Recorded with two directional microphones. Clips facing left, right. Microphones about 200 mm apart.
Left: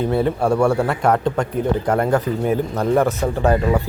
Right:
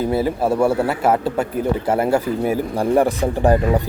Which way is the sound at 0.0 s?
5° right (ahead or behind).